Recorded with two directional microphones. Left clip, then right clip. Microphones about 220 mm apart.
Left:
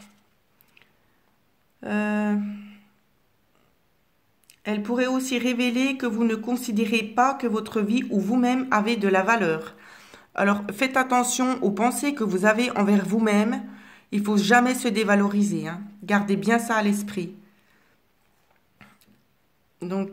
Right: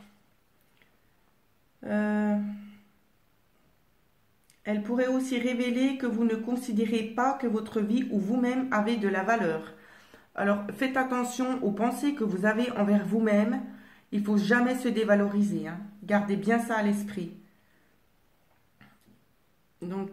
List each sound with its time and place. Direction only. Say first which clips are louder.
1.8 s a sound: left 3 dB; 50° left (ahead or behind)
4.5 s speech: left 4 dB; 50° left (ahead or behind)
19.8 s speech: left 6 dB; 50° left (ahead or behind)